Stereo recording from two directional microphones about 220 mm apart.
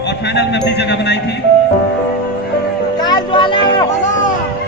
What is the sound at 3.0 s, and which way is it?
Vehicle, 20° left (ahead or behind).